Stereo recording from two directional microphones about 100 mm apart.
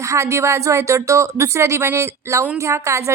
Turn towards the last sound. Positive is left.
turn(degrees=-30)  # may be behind; listen again after turning